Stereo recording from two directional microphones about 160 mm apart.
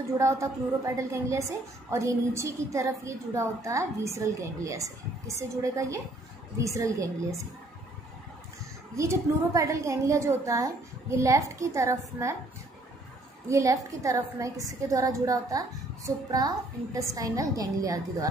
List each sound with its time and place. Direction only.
0.2 s a woman's voice: 20° right (ahead or behind)
8.9 s a woman's voice: 20° right (ahead or behind)
13.5 s a woman's voice: 20° right (ahead or behind)